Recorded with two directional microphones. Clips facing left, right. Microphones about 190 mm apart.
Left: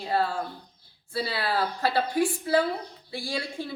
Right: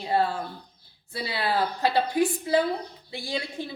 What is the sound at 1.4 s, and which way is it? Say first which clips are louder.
A woman's voice: right 4 dB; 20° right (ahead or behind).